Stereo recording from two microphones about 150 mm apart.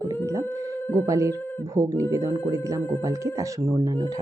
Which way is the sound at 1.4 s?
15° left (ahead or behind).